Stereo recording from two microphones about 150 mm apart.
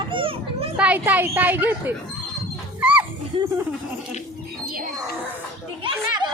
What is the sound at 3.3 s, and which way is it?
Speech, 35° right (ahead or behind).